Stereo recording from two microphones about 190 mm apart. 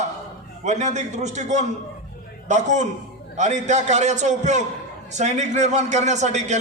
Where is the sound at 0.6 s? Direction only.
40° right (ahead or behind).